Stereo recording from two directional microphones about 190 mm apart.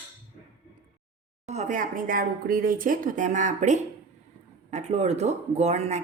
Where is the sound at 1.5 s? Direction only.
40° right (ahead or behind).